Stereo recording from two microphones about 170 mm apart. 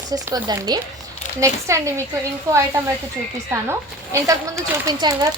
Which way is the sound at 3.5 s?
15° right (ahead or behind).